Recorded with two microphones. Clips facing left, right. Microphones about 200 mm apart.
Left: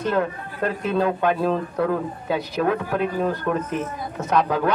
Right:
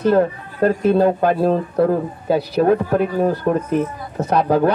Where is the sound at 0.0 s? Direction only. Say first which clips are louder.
Right 7 dB; 35° right (ahead or behind).